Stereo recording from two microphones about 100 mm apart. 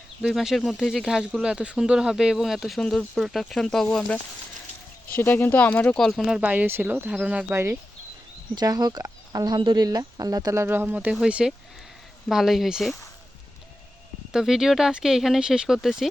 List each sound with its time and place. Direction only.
0.2 s speech: 5° right (ahead or behind)
5.1 s speech: 20° left (ahead or behind); by 6.4 s centre (ahead or behind)
6.4 s speech: 15° right (ahead or behind)
7.1 s speech: 10° right (ahead or behind)
7.5 s speech: 25° right (ahead or behind)
8.5 s speech: 40° right (ahead or behind)
9.6 s speech: 55° right (ahead or behind)
9.8 s speech: 40° right (ahead or behind); by 13.0 s centre (ahead or behind)
14.3 s speech: 5° right (ahead or behind)